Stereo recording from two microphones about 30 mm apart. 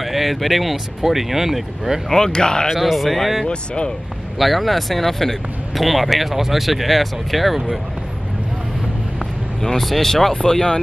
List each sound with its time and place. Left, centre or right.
0.0 s speech: centre
2.0 s speech: centre
2.8 s speech: centre
3.4 s speech: left
4.4 s speech: centre
9.8 s speech: centre
10.3 s speech: left